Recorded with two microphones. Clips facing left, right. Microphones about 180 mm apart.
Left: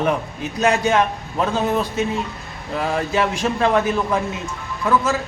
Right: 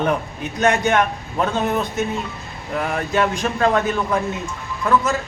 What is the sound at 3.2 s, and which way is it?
A man's voice, 10° left (ahead or behind).